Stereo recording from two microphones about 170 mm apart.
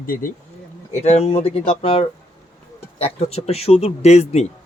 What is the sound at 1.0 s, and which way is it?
Speech, 35° left (ahead or behind).